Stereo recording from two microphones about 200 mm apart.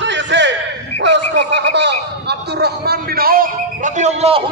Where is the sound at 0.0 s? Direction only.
65° right (ahead or behind).